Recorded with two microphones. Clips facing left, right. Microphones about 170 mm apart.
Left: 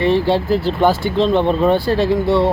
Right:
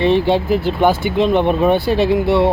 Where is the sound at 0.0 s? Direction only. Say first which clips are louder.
Right 1 dB; 20° right (ahead or behind).